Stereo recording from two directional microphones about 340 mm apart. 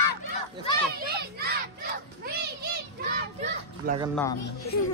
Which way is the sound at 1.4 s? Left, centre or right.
Right.